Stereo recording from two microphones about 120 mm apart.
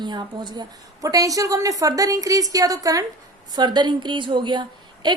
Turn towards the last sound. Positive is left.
turn(degrees=-40)  # may be behind; listen again after turning